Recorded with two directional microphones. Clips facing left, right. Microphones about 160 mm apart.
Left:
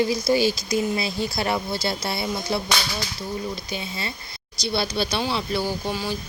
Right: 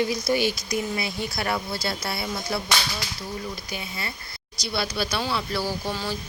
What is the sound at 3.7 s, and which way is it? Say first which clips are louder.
Speech: left 3 dB; 25° left (ahead or behind).